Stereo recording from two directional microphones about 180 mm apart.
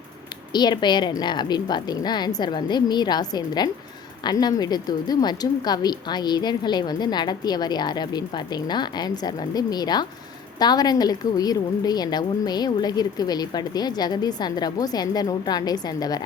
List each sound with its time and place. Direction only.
0.5 s a woman's voice: 25° left (ahead or behind)